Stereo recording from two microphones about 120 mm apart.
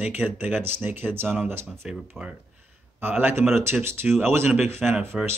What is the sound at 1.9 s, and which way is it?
Speech, 10° right (ahead or behind).